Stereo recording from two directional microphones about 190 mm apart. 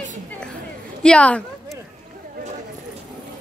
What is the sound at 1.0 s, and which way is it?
Speech, 5° left (ahead or behind).